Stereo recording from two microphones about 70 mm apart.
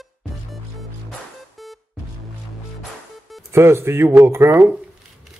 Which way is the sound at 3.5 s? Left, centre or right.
Right.